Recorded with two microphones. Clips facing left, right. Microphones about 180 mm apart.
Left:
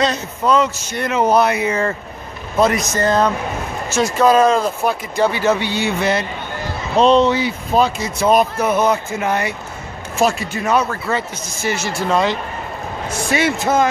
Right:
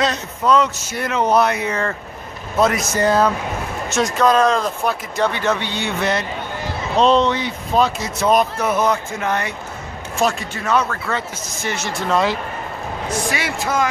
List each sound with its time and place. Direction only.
0.0 s a man's voice: centre (ahead or behind)
13.3 s speech: 25° left (ahead or behind)